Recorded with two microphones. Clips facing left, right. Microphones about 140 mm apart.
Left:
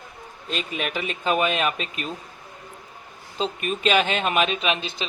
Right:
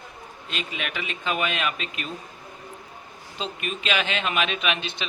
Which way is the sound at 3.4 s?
40° left (ahead or behind).